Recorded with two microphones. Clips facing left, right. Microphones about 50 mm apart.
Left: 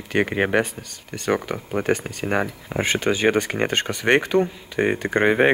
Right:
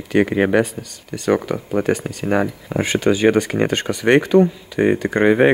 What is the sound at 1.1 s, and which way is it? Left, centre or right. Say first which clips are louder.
Speech: right 5 dB; left.